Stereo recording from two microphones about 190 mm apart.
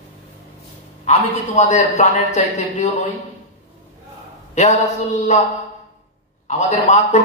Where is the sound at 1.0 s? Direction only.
35° left (ahead or behind).